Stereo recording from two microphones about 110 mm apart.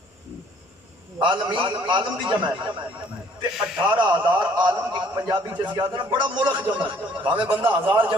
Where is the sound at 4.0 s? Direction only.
45° right (ahead or behind).